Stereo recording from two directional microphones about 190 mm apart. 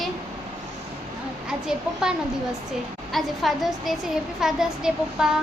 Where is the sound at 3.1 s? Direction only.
Centre (ahead or behind).